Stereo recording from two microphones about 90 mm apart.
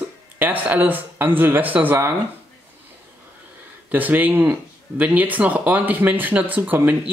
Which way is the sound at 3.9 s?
20° right (ahead or behind).